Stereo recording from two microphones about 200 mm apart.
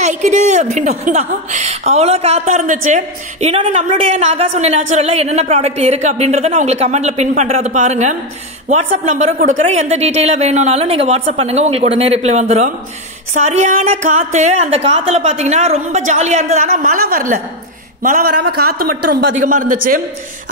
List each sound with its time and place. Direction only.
0.0 s a woman's voice: 35° right (ahead or behind)